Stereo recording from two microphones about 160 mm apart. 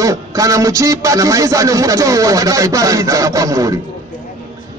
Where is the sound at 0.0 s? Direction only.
20° right (ahead or behind).